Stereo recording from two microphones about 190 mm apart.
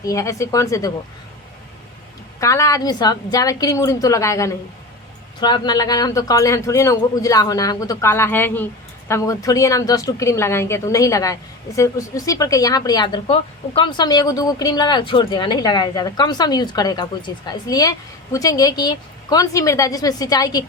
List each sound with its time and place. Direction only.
0.0 s a woman's voice: 15° left (ahead or behind)
2.4 s a woman's voice: 15° left (ahead or behind)